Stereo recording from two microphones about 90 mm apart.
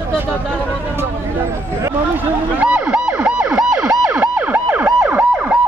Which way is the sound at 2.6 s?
10° right (ahead or behind).